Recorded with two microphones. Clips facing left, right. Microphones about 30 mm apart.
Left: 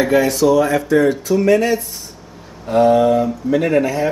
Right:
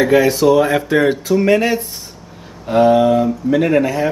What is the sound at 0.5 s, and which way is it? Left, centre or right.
Speech, right.